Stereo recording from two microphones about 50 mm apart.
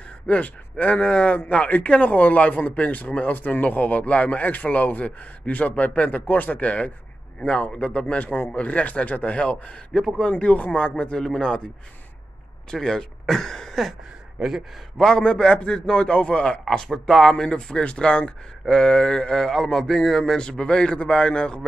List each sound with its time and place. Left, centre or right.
0.3 s a man's voice: left
9.9 s speech: centre
10.3 s speech: left
12.7 s speech: centre
15.0 s speech: centre
16.6 s speech: centre